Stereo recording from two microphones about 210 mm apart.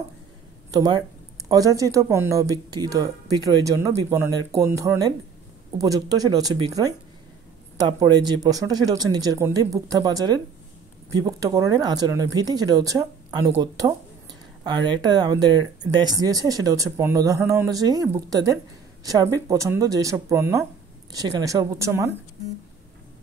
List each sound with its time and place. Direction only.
0.7 s speech: 20° right (ahead or behind)